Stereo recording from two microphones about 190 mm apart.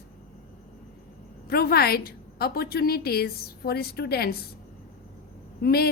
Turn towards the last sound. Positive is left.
turn(degrees=55)  # may be behind; listen again after turning